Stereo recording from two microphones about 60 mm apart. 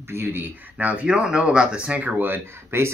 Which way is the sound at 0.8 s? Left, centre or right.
Right.